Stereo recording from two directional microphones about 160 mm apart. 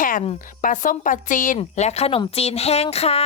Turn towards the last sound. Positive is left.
turn(degrees=40)  # may be behind; listen again after turning